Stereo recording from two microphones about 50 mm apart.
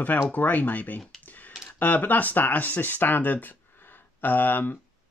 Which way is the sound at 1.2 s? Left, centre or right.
Left.